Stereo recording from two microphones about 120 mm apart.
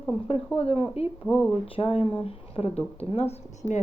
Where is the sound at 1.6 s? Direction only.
50° left (ahead or behind).